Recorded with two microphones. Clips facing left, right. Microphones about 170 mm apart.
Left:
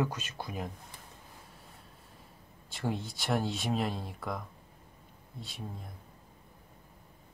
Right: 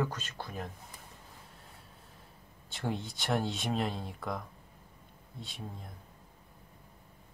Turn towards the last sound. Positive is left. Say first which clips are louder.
# left 1 dB
turn(degrees=0)  # may be behind; listen again after turning